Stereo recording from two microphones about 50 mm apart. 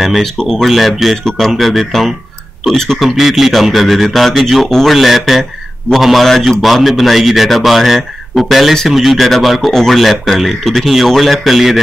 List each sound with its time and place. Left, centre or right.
0.0 s a man's voice: centre
0.7 s a man's voice: centre
4.9 s speech: centre